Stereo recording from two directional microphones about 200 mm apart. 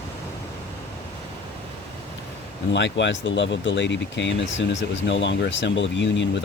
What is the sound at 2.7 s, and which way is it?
Speech, 65° left (ahead or behind).